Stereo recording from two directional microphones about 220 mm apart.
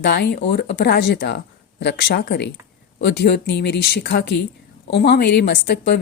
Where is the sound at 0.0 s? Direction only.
50° left (ahead or behind).